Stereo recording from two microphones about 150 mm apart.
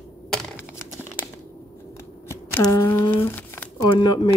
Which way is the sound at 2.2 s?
20° left (ahead or behind).